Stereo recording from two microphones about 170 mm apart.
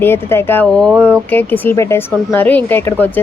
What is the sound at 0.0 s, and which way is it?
A woman's voice, 15° left (ahead or behind).